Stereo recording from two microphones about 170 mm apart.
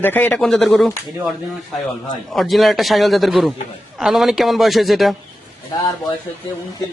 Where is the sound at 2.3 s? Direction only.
Centre (ahead or behind).